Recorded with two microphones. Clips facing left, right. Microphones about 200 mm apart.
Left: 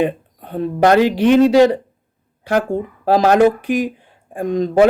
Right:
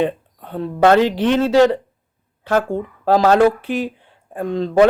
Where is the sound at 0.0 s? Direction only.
15° left (ahead or behind).